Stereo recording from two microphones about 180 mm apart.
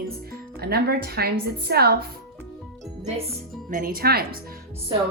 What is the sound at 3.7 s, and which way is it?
Speech, 50° right (ahead or behind).